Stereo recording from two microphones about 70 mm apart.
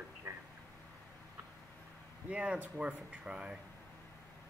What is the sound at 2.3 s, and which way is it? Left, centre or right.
Speech, centre.